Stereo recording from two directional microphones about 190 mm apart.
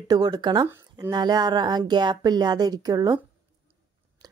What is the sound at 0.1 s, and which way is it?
Speech, 20° right (ahead or behind).